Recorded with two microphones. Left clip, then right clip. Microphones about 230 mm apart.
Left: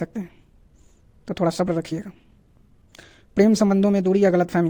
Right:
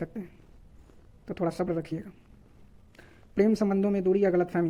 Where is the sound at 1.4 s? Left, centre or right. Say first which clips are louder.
Left 7 dB; left.